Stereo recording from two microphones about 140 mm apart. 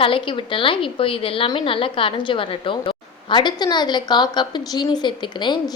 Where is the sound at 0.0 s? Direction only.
40° left (ahead or behind).